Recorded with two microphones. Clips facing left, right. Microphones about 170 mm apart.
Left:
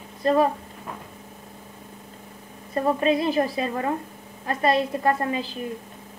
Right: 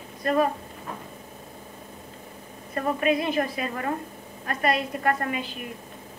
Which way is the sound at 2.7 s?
25° left (ahead or behind).